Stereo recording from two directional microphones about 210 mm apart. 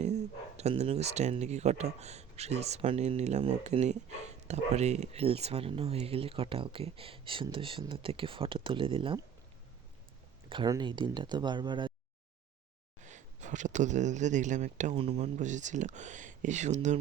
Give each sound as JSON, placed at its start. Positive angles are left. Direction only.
{"t": 0.0, "sound": "speech", "side_deg": -30}
{"t": 10.5, "sound": "speech", "side_deg": -20}
{"t": 13.1, "sound": "speech", "side_deg": -35}